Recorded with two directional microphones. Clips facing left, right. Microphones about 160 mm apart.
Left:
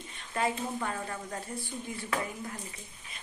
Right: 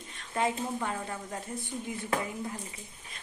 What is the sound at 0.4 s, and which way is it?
Speech, 20° right (ahead or behind).